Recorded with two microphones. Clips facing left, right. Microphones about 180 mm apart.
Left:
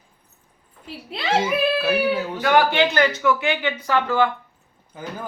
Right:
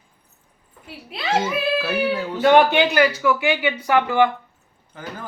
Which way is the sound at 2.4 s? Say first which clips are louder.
Right 4 dB; 25° right (ahead or behind).